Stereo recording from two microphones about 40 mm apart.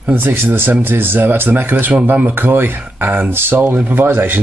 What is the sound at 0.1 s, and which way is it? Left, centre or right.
Speech, right.